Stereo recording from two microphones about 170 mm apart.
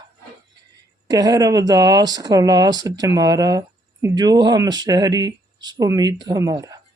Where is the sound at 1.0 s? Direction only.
20° right (ahead or behind).